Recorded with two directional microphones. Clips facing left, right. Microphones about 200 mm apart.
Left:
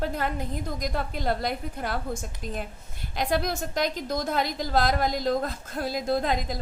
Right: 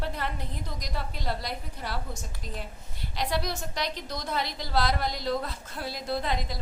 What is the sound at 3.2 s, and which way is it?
A woman's voice, 50° left (ahead or behind).